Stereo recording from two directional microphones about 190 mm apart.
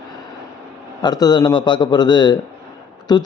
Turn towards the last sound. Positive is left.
turn(degrees=20)  # may be behind; listen again after turning